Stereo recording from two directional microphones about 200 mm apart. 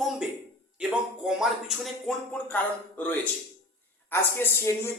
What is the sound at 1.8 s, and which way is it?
Speech, 5° left (ahead or behind).